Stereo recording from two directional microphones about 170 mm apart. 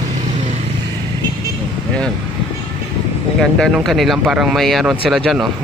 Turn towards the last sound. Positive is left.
turn(degrees=0)  # may be behind; listen again after turning